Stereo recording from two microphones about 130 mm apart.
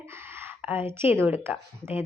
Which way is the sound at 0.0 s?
20° right (ahead or behind).